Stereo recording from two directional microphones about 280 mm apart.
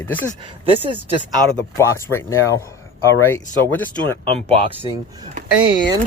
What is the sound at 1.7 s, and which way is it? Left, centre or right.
Speech, centre.